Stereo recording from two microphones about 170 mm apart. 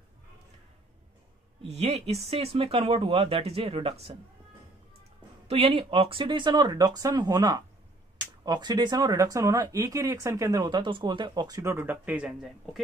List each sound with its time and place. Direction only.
1.6 s speech: 40° right (ahead or behind)
5.5 s speech: 35° right (ahead or behind); by 12.8 s 5° right (ahead or behind)